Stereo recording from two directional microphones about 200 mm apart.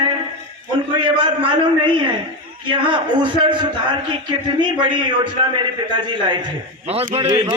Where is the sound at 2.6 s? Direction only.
25° right (ahead or behind).